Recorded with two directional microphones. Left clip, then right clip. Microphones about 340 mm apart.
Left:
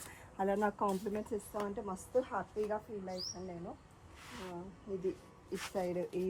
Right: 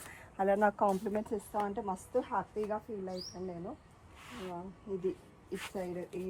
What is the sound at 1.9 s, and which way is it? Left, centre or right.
Speech, right.